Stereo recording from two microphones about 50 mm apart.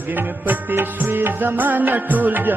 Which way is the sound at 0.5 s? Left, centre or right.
Right.